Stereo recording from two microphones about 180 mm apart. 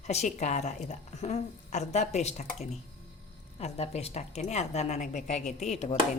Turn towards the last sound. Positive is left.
turn(degrees=35)  # may be behind; listen again after turning